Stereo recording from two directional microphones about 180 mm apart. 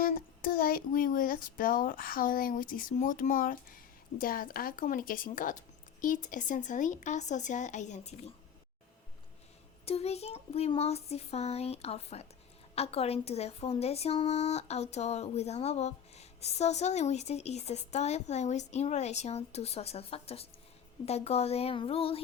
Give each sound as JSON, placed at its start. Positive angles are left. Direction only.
{"t": 0.0, "sound": "speech", "side_deg": 50}
{"t": 9.8, "sound": "speech", "side_deg": 35}